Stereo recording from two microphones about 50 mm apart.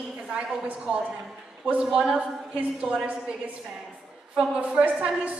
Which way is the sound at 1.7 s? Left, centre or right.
Centre.